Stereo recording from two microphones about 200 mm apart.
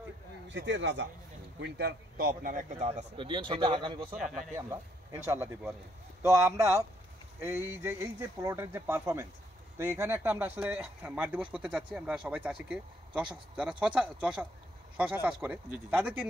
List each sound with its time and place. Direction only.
0.5 s a man's voice: 65° right (ahead or behind)
1.6 s speech: 55° right (ahead or behind); by 4.1 s 25° right (ahead or behind)
4.2 s speech: centre (ahead or behind)
4.6 s speech: 15° right (ahead or behind)